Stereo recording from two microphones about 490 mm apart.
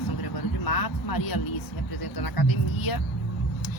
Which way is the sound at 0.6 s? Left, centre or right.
Left.